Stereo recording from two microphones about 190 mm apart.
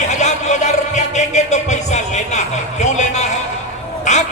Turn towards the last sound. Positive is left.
turn(degrees=40)  # may be behind; listen again after turning